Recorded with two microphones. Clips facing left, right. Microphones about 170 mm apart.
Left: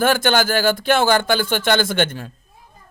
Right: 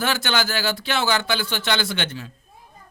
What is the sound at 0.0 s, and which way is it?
Speech, 50° left (ahead or behind).